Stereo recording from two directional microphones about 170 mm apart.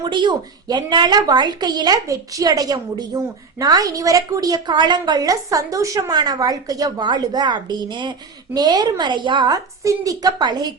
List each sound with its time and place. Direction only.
0.0 s a woman's voice: 25° right (ahead or behind)